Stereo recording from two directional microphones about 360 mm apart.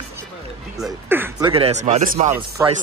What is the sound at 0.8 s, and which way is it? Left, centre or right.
Speech, centre.